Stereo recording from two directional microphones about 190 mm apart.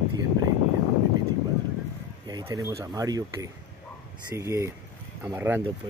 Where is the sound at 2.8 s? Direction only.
20° right (ahead or behind).